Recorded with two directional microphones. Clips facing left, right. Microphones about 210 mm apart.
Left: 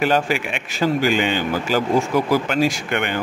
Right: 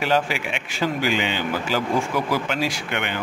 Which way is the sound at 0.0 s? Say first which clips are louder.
Left 3 dB; 50° left (ahead or behind).